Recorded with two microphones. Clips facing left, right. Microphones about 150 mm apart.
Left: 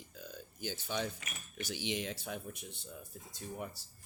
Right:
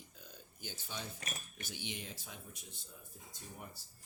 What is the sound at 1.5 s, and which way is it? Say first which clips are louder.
Speech: left 13 dB; 90° left.